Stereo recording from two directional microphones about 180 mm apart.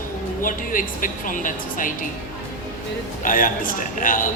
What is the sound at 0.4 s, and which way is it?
A woman's voice, 50° left (ahead or behind).